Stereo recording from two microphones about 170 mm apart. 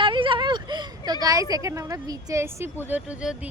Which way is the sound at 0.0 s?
30° right (ahead or behind).